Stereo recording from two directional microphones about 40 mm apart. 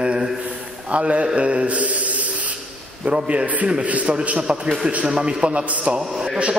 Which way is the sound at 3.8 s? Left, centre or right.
Right.